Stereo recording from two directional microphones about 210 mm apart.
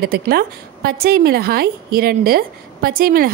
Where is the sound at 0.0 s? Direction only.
45° right (ahead or behind).